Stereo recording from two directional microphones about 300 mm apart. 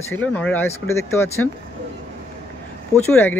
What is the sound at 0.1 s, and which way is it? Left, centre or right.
Speech, centre.